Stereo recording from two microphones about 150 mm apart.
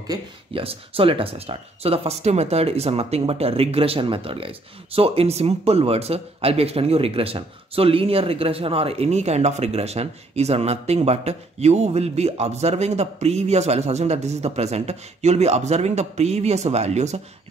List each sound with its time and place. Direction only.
0.5 s speech: 40° right (ahead or behind)